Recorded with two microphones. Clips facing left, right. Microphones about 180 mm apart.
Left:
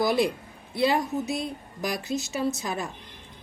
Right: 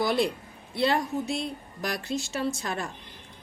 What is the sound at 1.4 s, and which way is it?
Speech, centre (ahead or behind).